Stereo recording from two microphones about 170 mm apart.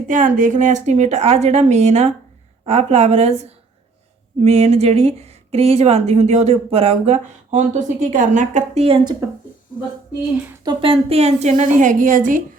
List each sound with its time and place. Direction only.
0.1 s a woman's voice: 50° right (ahead or behind)
9.2 s speech: 15° right (ahead or behind)
10.6 s a woman's voice: 30° right (ahead or behind); by 12.4 s 50° right (ahead or behind)